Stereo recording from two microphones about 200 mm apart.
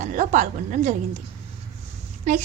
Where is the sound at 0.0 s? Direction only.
40° right (ahead or behind).